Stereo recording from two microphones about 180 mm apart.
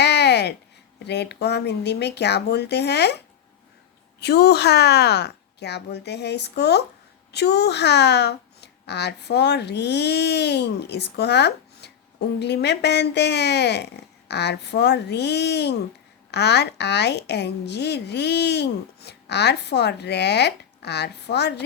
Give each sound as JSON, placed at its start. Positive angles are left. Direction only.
{"t": 0.0, "sound": "a sound", "side_deg": 65}
{"t": 0.9, "sound": "a woman's voice", "side_deg": 70}
{"t": 4.2, "sound": "a woman's voice", "side_deg": 65}